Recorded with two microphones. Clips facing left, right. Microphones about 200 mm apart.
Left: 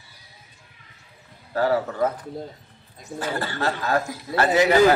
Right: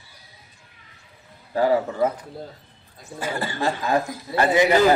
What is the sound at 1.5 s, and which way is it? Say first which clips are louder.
Speech: right 2 dB; 15° right (ahead or behind).